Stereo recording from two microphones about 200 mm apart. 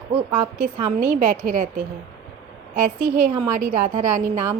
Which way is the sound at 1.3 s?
40° right (ahead or behind).